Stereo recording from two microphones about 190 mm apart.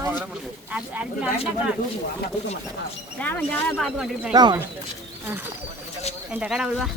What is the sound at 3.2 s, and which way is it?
Speech, 10° left (ahead or behind).